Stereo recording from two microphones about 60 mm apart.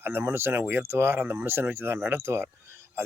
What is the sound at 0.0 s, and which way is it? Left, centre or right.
Speech, right.